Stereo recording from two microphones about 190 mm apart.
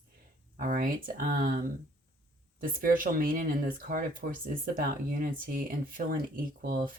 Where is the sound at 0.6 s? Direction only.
50° right (ahead or behind).